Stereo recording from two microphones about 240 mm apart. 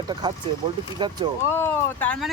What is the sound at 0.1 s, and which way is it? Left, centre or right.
Speech, centre.